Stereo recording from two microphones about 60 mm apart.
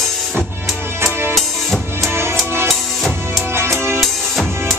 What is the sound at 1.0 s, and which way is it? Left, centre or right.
Music, right.